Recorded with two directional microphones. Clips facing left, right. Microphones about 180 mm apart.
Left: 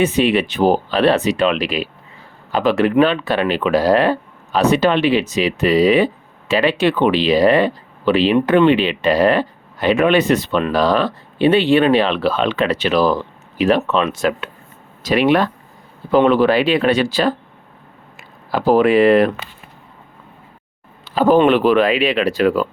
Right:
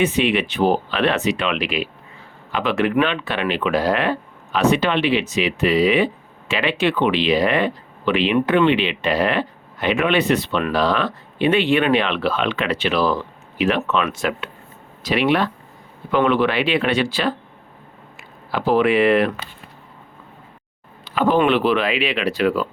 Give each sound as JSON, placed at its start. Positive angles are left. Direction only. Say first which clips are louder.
{"t": 0.0, "sound": "speech", "louder": "left 3 dB", "side_deg": 40}
{"t": 21.2, "sound": "speech", "louder": "left 4 dB", "side_deg": 40}